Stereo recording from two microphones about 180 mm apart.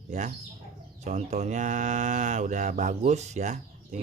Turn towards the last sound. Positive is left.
turn(degrees=-40)  # may be behind; listen again after turning